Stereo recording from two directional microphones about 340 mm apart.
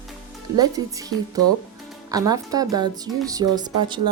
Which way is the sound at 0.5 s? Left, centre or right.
Centre.